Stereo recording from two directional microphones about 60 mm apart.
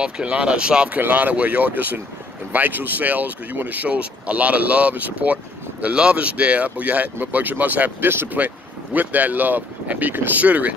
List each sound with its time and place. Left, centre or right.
0.0 s speech: centre
0.9 s speech: right